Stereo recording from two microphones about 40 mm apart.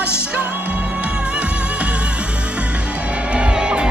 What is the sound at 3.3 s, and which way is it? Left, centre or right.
Music, right.